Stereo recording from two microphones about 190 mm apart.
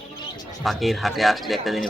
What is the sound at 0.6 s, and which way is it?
A man's voice, centre (ahead or behind).